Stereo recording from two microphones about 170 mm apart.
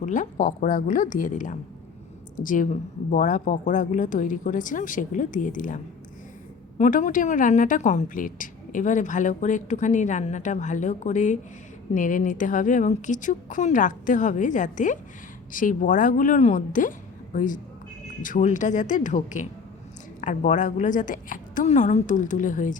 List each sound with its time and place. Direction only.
0.0 s a woman's voice: 50° left (ahead or behind)